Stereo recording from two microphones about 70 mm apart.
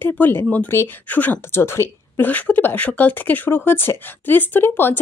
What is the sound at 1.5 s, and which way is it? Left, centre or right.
Speech, left.